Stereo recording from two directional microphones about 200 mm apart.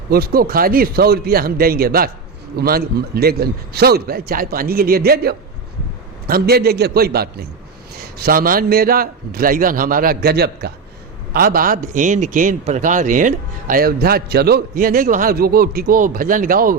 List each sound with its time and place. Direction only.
0.1 s a man's voice: 50° right (ahead or behind)